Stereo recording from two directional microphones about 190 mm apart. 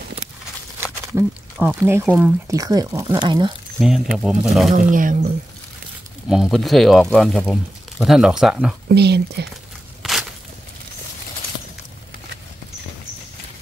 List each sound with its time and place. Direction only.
1.1 s speech: 10° right (ahead or behind)
4.2 s speech: centre (ahead or behind)
4.7 s speech: 45° right (ahead or behind)
6.2 s speech: 5° right (ahead or behind)
8.8 s speech: 60° right (ahead or behind)
10.0 s a sound: centre (ahead or behind)